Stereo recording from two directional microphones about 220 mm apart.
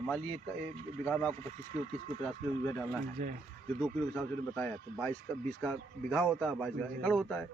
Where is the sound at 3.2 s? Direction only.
35° right (ahead or behind).